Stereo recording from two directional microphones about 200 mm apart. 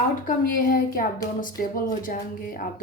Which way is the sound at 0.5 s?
45° left (ahead or behind).